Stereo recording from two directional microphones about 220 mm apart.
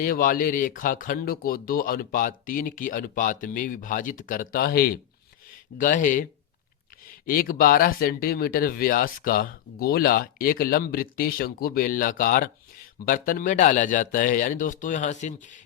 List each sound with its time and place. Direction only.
0.0 s speech: 40° left (ahead or behind)
7.3 s speech: 40° left (ahead or behind)